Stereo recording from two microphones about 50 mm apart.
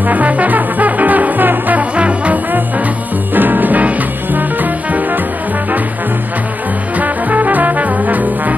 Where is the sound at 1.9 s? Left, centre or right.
Right.